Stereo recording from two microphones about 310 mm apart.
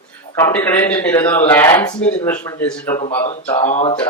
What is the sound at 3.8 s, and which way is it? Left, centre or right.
Speech, centre.